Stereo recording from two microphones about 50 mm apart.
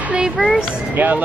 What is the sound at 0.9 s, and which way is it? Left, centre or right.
Speech, right.